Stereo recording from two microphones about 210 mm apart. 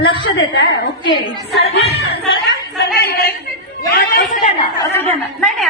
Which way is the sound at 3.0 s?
50° left (ahead or behind).